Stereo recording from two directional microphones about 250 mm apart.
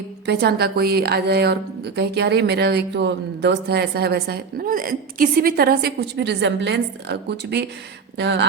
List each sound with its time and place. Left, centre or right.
0.3 s a woman's voice: right